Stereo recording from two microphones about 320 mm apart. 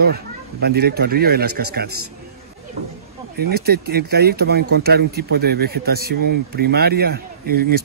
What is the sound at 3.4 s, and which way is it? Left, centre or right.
A man's voice, right.